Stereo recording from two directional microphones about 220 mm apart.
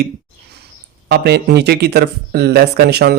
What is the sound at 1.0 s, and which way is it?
Speech, 45° right (ahead or behind).